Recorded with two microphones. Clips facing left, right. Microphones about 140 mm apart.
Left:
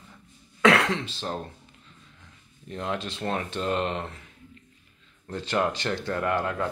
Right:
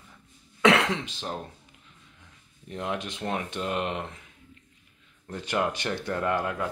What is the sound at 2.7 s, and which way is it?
Speech, 15° right (ahead or behind).